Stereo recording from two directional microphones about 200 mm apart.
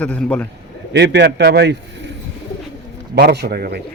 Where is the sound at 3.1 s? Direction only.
55° right (ahead or behind).